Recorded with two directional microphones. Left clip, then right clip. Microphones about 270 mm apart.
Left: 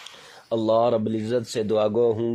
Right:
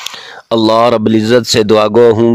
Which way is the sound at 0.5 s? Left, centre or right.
Right.